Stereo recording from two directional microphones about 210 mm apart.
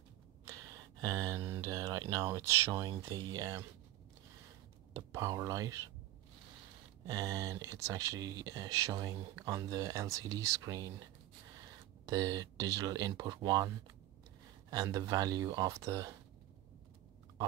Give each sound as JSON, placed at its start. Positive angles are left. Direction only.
{"t": 1.0, "sound": "speech", "side_deg": -15}
{"t": 4.9, "sound": "speech", "side_deg": -15}
{"t": 7.1, "sound": "speech", "side_deg": -15}
{"t": 12.1, "sound": "speech", "side_deg": -20}